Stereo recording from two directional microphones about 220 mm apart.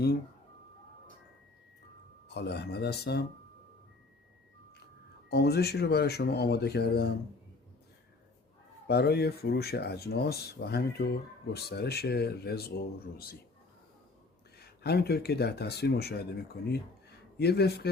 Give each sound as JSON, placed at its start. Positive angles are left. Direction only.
{"t": 2.3, "sound": "speech", "side_deg": 50}
{"t": 5.3, "sound": "speech", "side_deg": 45}
{"t": 8.9, "sound": "speech", "side_deg": 45}
{"t": 14.6, "sound": "speech", "side_deg": 45}